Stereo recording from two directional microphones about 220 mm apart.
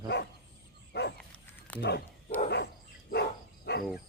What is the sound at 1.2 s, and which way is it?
Dog, 10° left (ahead or behind).